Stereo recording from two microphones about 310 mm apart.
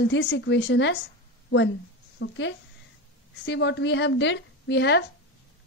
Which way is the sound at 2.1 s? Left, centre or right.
Left.